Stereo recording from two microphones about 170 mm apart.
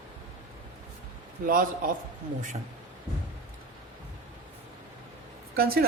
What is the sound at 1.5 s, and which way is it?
Speech, 55° right (ahead or behind).